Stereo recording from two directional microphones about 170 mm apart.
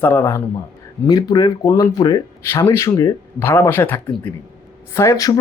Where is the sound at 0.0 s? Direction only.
10° left (ahead or behind).